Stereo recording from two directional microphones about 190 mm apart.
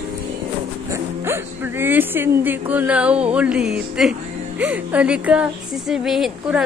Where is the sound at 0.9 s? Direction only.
15° right (ahead or behind).